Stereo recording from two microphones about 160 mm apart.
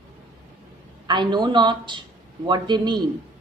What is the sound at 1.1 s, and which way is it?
A woman's voice, 30° right (ahead or behind).